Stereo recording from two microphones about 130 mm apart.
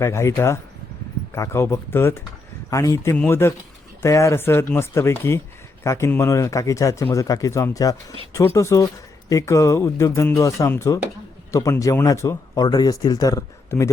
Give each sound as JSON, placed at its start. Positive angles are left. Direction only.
{"t": 0.0, "sound": "speech", "side_deg": 20}